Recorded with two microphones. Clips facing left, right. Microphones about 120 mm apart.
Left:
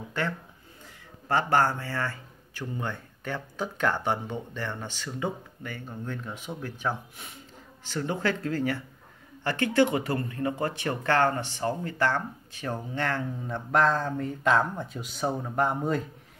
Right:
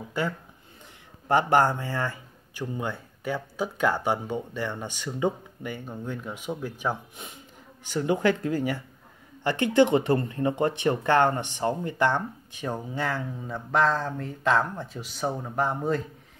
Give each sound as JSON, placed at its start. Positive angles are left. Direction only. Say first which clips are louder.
{"t": 1.3, "sound": "speech", "louder": "right 3 dB", "side_deg": -15}